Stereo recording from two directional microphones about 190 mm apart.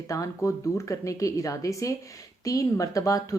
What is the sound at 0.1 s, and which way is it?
A woman's voice, 15° left (ahead or behind).